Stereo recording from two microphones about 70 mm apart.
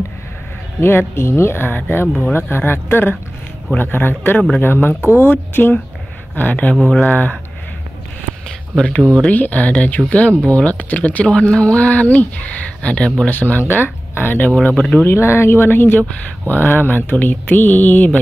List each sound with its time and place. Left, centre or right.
0.7 s speech: left
8.5 s a sound: centre
9.3 s speech: left
14.5 s speech: centre
15.0 s speech: left